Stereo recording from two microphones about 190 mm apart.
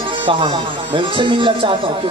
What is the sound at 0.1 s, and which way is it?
Speech, 25° right (ahead or behind).